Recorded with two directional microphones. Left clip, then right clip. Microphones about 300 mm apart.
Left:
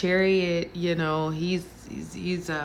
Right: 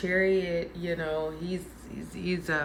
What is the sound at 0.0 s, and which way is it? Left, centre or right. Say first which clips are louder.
Speech: left 3 dB; centre.